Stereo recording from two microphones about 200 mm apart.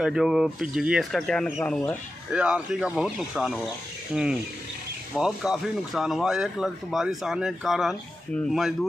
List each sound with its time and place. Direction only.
0.0 s speech: centre (ahead or behind)
2.3 s speech: 5° right (ahead or behind)